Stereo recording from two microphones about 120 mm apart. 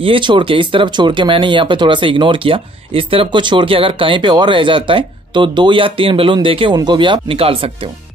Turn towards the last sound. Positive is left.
turn(degrees=-50)  # may be behind; listen again after turning